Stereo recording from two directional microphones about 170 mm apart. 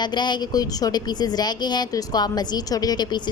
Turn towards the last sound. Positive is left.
turn(degrees=25)  # may be behind; listen again after turning